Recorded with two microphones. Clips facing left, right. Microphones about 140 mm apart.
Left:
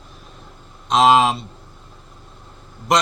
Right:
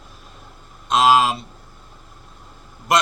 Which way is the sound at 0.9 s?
Centre (ahead or behind).